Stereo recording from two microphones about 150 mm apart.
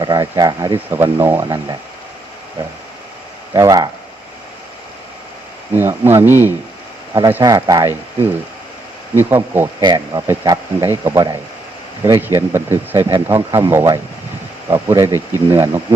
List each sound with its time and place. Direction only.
0.0 s speech: 25° right (ahead or behind)
3.5 s speech: 25° right (ahead or behind)
5.7 s speech: 15° right (ahead or behind)
9.8 s speech: 25° right (ahead or behind)